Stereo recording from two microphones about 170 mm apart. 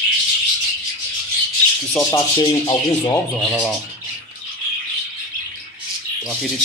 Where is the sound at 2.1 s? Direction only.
25° left (ahead or behind).